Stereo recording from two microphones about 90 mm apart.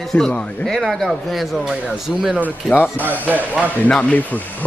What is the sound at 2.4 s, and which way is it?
Speech, 20° left (ahead or behind).